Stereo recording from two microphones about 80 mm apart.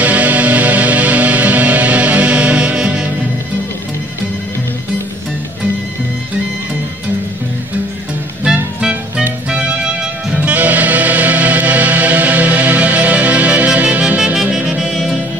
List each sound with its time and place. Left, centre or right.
0.0 s music: centre
8.5 s music: centre
10.3 s music: centre